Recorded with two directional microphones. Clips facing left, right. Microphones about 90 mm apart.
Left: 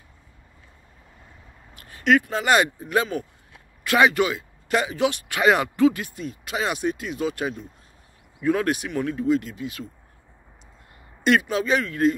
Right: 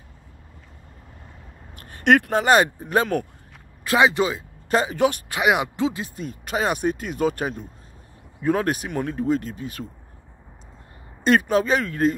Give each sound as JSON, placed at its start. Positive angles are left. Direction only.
{"t": 1.8, "sound": "speech", "side_deg": -50}
{"t": 2.4, "sound": "speech", "side_deg": -35}
{"t": 3.8, "sound": "speech", "side_deg": -25}
{"t": 5.4, "sound": "speech", "side_deg": -15}
{"t": 6.1, "sound": "speech", "side_deg": -40}
{"t": 11.2, "sound": "speech", "side_deg": -40}